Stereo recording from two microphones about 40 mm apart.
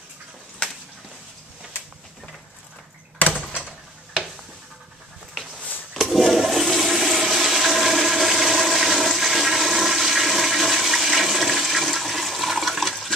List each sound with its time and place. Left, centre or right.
3.2 s door: left
6.1 s toilet flush: centre